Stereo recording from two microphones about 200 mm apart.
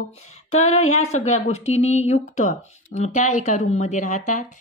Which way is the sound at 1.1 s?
35° left (ahead or behind).